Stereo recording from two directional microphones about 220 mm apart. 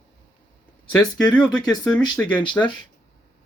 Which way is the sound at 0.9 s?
5° left (ahead or behind).